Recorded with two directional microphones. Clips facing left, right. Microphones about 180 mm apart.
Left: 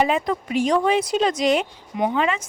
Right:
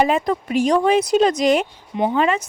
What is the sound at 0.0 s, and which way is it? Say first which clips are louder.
A woman's voice: right 3 dB; 45° right (ahead or behind).